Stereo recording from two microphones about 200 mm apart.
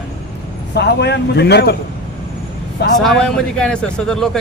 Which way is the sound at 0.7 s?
55° left (ahead or behind).